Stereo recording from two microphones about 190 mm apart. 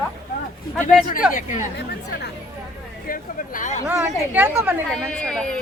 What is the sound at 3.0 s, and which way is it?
Speech, 45° left (ahead or behind).